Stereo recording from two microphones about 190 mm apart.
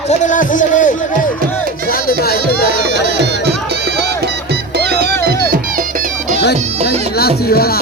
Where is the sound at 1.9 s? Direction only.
55° left (ahead or behind).